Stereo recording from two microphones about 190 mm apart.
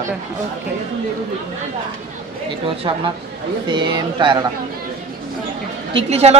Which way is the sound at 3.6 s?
25° right (ahead or behind).